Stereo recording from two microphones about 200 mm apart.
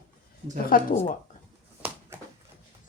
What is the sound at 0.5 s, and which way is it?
Speech, 45° left (ahead or behind).